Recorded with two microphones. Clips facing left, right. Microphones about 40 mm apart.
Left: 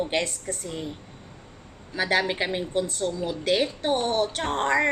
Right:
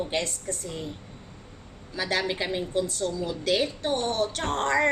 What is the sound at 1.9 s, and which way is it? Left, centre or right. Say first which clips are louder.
A woman's voice: left 4 dB; left.